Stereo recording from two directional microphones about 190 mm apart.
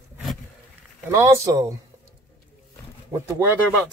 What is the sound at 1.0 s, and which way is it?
Speech, 15° right (ahead or behind).